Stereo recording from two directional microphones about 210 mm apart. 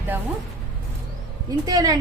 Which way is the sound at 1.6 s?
15° right (ahead or behind).